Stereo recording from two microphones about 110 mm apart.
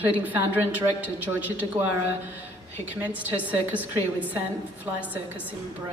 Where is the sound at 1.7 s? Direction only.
60° right (ahead or behind).